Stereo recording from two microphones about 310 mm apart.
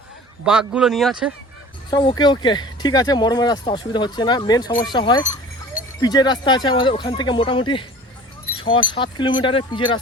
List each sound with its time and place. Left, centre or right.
0.4 s a man's voice: centre
1.9 s speech: centre